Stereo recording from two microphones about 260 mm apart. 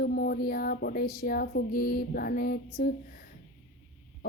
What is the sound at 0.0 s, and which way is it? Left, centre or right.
A woman's voice, left.